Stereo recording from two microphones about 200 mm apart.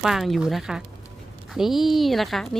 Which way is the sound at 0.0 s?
Centre (ahead or behind).